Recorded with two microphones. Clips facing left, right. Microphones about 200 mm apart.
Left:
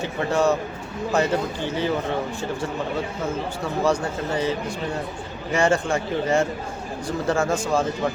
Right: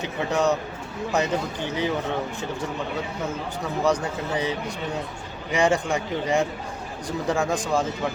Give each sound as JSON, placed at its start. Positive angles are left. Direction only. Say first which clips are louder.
{"t": 0.0, "sound": "speech", "louder": "left 2 dB", "side_deg": -15}
{"t": 3.8, "sound": "speech", "louder": "left 1 dB", "side_deg": -15}